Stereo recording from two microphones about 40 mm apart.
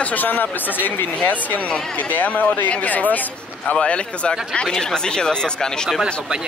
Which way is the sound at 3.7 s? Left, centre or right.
Left.